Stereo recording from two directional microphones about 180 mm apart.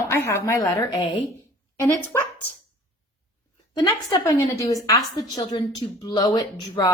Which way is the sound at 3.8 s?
20° left (ahead or behind).